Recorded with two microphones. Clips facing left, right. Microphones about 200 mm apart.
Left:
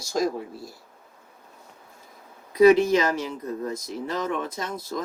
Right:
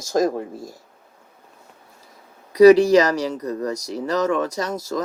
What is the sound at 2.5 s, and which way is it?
Speech, 90° right.